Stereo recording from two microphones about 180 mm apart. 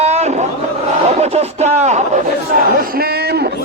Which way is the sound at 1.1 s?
35° right (ahead or behind).